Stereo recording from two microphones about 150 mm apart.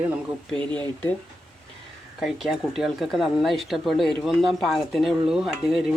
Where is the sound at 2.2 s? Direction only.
Centre (ahead or behind).